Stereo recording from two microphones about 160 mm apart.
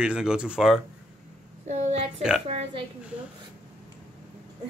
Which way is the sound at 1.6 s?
45° right (ahead or behind).